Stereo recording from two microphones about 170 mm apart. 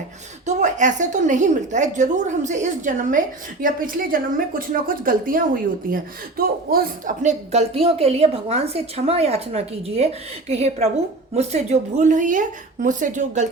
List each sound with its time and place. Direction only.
0.4 s a woman's voice: 45° right (ahead or behind)